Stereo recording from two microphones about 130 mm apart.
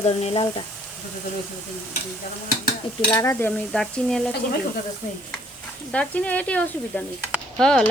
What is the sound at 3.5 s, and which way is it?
Frying, 5° left (ahead or behind).